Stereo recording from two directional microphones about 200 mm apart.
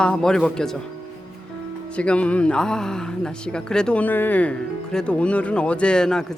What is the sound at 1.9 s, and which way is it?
Speech, 5° left (ahead or behind).